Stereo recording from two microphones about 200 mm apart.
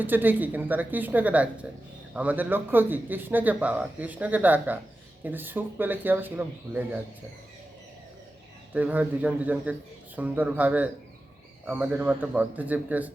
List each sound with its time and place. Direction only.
0.0 s speech: 10° right (ahead or behind)
8.7 s speech: 10° right (ahead or behind)